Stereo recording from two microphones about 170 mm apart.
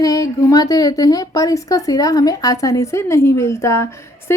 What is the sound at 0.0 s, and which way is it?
Speech, 20° left (ahead or behind).